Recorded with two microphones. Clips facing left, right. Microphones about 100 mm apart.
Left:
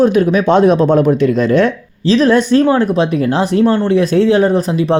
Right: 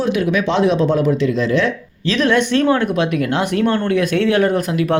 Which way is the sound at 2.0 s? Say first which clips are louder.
Left 5 dB; 35° left (ahead or behind).